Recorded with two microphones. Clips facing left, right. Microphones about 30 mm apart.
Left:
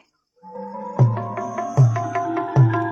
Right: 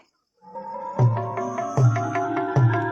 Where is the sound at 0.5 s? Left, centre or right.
Centre.